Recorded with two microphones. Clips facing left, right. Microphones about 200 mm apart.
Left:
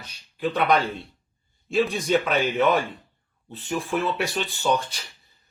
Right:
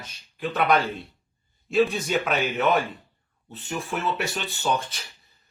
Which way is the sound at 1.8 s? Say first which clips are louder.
Left 3 dB; centre (ahead or behind).